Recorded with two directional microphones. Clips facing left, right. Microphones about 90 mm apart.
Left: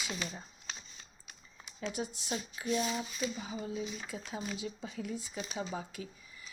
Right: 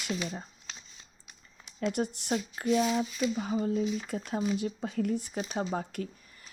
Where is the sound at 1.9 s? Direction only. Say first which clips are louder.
Right 7 dB; 65° right (ahead or behind).